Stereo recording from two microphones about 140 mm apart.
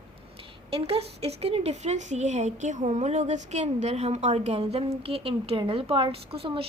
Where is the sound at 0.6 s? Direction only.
45° right (ahead or behind).